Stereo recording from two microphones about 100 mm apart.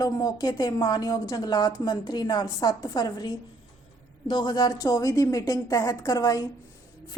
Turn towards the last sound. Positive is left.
turn(degrees=35)  # may be behind; listen again after turning